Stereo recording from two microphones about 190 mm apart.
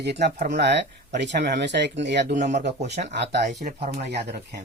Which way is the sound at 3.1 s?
65° right (ahead or behind).